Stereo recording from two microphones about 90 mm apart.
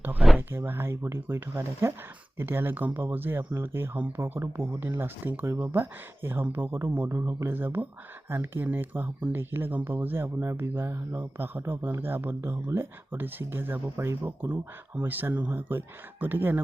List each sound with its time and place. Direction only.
0.3 s speech: 25° right (ahead or behind)